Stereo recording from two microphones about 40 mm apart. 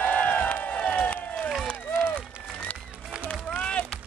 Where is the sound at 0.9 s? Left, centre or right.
Left.